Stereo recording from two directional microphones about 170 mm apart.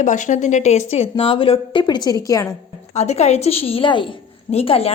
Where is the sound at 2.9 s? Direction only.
40° left (ahead or behind).